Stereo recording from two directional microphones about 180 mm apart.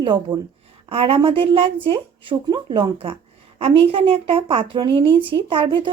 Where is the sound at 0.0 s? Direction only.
25° right (ahead or behind).